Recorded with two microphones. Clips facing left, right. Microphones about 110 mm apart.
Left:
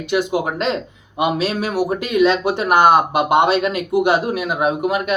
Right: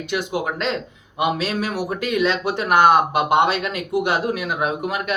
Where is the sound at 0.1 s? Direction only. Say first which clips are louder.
Left 5 dB; 10° left (ahead or behind).